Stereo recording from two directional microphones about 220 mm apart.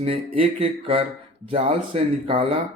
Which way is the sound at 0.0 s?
25° right (ahead or behind).